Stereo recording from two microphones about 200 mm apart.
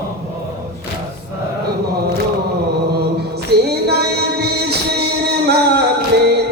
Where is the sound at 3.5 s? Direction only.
55° right (ahead or behind).